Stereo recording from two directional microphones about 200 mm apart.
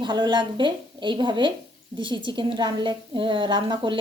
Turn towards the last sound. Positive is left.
turn(degrees=-25)  # may be behind; listen again after turning